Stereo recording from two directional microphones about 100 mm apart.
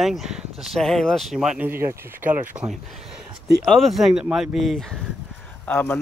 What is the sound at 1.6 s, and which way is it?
Speech, 25° right (ahead or behind).